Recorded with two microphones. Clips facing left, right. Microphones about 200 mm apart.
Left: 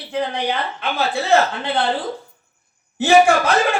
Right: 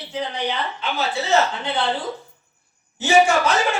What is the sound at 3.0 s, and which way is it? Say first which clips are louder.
Speech: left 3 dB; 55° left (ahead or behind).